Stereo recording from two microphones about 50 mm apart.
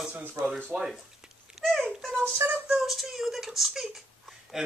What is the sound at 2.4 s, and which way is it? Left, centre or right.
Speech, right.